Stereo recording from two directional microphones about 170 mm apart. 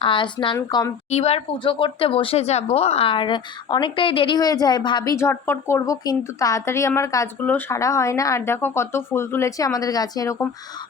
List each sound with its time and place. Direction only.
0.0 s speech: 30° left (ahead or behind)
1.1 s speech: 35° left (ahead or behind); by 10.3 s 20° left (ahead or behind)